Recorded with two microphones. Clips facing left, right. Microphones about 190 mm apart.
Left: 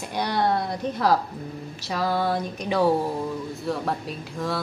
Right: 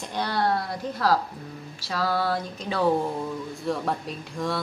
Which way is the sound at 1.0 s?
20° left (ahead or behind).